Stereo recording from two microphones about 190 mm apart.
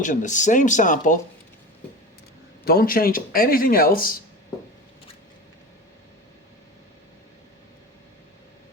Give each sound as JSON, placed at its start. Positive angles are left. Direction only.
{"t": 0.0, "sound": "speech", "side_deg": 40}
{"t": 2.6, "sound": "speech", "side_deg": 50}